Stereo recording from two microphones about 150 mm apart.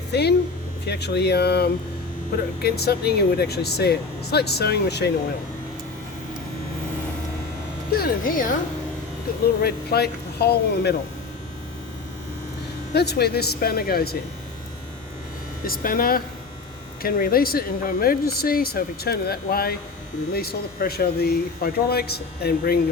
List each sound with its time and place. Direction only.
0.1 s speech: 90° left
7.9 s speech: 90° left; by 8.5 s 65° left (ahead or behind)
9.6 s speech: 90° left
12.9 s speech: 90° left
15.6 s speech: 75° left (ahead or behind); by 22.8 s 90° left